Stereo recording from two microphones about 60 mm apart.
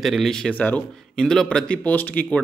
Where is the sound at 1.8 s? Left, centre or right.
Left.